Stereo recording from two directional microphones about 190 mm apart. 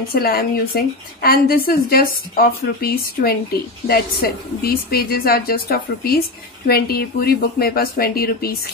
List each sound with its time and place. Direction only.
0.1 s a woman's voice: 55° left (ahead or behind)